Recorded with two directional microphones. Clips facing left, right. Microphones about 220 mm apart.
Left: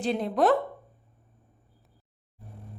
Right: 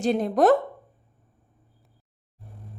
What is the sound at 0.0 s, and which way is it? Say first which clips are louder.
Speech: right 4 dB; 45° right (ahead or behind).